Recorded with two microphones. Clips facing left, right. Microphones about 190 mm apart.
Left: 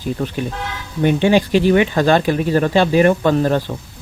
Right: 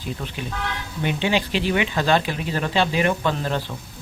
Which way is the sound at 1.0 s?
50° left (ahead or behind).